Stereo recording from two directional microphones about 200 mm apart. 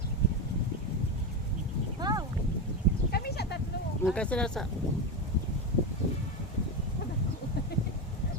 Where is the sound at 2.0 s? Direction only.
20° right (ahead or behind).